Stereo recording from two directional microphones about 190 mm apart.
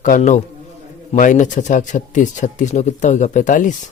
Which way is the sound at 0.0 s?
40° left (ahead or behind).